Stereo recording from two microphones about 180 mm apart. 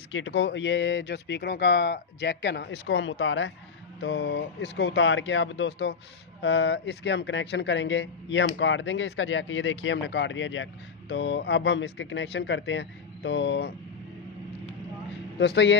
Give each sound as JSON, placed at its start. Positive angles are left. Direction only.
{"t": 0.1, "sound": "speech", "side_deg": 90}
{"t": 11.1, "sound": "speech", "side_deg": 80}
{"t": 15.4, "sound": "speech", "side_deg": 75}